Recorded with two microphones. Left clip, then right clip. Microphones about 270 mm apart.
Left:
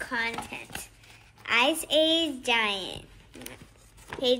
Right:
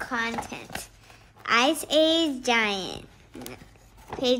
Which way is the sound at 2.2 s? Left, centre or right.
Right.